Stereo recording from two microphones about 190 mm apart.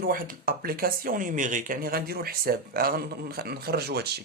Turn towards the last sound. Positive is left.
turn(degrees=-55)  # may be behind; listen again after turning